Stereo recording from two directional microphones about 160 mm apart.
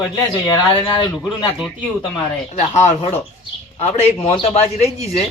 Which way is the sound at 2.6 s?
40° left (ahead or behind).